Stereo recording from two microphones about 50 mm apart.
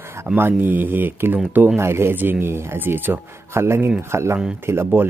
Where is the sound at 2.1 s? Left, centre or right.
Right.